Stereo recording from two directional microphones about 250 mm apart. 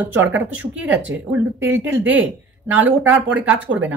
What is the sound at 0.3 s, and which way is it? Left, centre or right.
Speech, centre.